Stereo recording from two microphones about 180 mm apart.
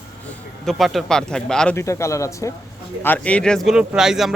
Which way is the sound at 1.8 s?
15° left (ahead or behind).